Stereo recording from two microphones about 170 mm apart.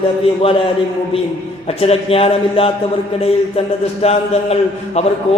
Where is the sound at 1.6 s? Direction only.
35° left (ahead or behind).